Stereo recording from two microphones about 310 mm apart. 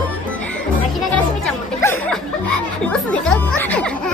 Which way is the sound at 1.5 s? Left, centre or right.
Centre.